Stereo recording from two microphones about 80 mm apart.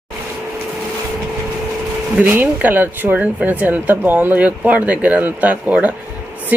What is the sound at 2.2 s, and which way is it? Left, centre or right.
Speech, right.